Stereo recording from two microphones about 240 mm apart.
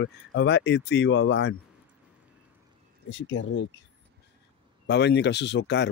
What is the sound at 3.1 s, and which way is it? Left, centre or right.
Speech, left.